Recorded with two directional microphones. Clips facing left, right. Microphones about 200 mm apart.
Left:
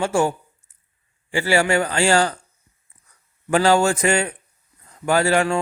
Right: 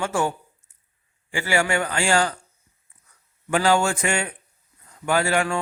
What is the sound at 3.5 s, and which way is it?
Speech, 40° left (ahead or behind).